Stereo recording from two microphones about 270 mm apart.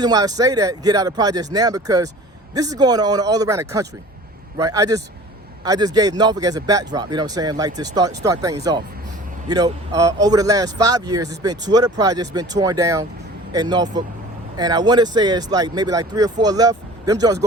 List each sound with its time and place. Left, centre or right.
0.0 s a man's voice: centre